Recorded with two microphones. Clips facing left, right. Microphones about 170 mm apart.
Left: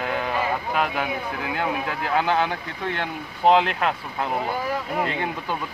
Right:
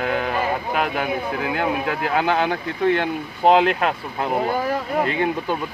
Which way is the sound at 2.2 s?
15° right (ahead or behind).